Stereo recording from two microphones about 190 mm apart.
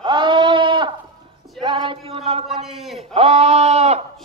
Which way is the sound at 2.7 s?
Centre (ahead or behind).